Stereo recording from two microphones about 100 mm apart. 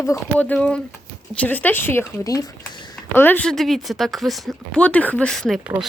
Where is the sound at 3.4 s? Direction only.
5° left (ahead or behind).